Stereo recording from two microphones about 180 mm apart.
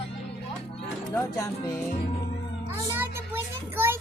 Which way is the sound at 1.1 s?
15° left (ahead or behind).